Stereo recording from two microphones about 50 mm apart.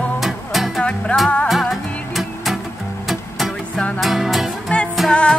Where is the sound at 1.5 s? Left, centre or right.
Centre.